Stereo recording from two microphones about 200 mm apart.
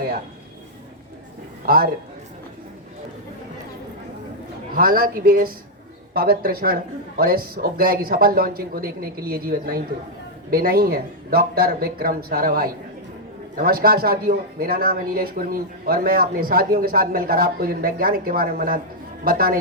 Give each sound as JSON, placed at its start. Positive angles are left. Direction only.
{"t": 1.6, "sound": "speech", "side_deg": -50}
{"t": 4.7, "sound": "speech", "side_deg": -45}